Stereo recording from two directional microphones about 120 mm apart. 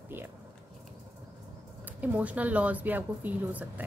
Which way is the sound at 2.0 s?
10° right (ahead or behind).